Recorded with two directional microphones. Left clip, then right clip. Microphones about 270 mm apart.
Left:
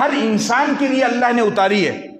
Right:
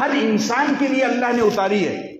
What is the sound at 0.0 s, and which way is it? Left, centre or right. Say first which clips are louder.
A man's voice: left 2 dB; left.